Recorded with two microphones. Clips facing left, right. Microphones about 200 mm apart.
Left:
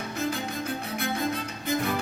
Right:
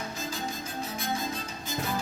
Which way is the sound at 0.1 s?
60° left (ahead or behind).